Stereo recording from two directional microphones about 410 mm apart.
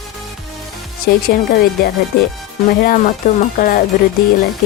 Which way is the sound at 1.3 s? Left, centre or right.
Left.